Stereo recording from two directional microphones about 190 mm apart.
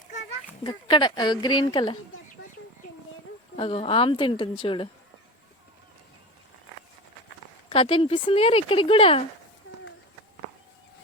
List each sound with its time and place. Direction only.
0.6 s speech: 25° left (ahead or behind)
3.5 s speech: 30° left (ahead or behind)
7.7 s speech: 30° left (ahead or behind)